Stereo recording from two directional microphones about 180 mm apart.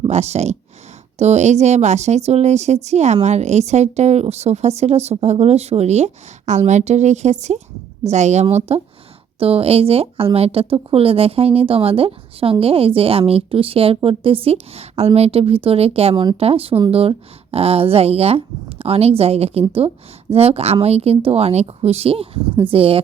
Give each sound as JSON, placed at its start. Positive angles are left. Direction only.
{"t": 0.1, "sound": "speech", "side_deg": -35}